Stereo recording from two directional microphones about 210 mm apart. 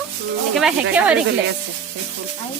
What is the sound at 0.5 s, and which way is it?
Speech, 5° right (ahead or behind).